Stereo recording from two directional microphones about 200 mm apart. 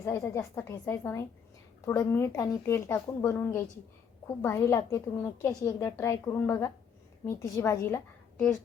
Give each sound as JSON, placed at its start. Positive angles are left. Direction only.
{"t": 0.0, "sound": "speech", "side_deg": 15}